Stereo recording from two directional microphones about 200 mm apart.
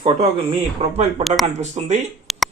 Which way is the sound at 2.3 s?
Centre (ahead or behind).